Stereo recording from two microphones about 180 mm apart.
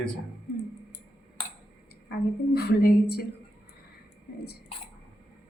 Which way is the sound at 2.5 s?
60° left (ahead or behind).